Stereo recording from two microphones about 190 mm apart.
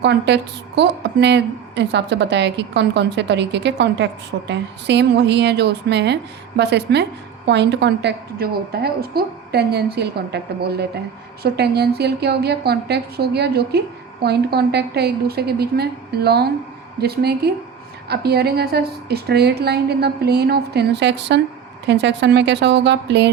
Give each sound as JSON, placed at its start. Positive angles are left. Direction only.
{"t": 0.0, "sound": "a woman's voice", "side_deg": -65}